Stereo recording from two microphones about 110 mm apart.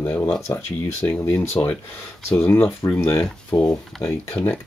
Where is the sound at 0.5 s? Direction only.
30° left (ahead or behind); by 4.6 s 15° left (ahead or behind).